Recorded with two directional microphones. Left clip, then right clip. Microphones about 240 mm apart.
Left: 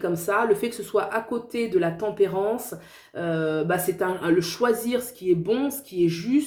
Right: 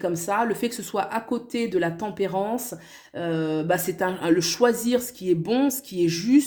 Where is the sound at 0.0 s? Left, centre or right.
Right.